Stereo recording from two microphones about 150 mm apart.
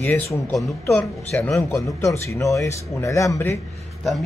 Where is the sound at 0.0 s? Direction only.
15° left (ahead or behind).